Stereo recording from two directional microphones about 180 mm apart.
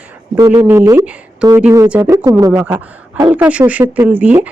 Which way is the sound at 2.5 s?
10° right (ahead or behind).